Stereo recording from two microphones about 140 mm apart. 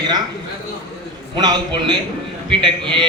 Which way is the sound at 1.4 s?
30° right (ahead or behind).